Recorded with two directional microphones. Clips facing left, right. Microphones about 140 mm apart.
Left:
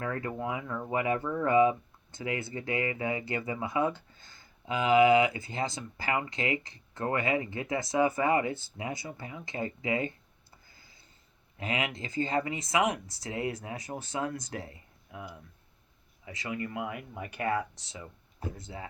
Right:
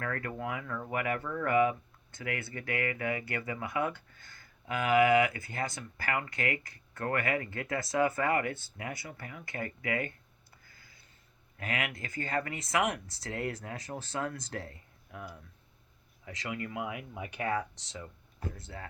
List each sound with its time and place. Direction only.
0.0 s speech: 20° left (ahead or behind)
10.8 s a sound: 25° left (ahead or behind)
11.5 s speech: 20° left (ahead or behind)